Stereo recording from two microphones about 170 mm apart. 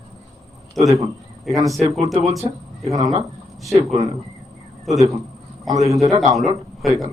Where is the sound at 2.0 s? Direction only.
40° right (ahead or behind).